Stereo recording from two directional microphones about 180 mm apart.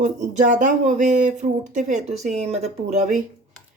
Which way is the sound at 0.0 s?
45° right (ahead or behind).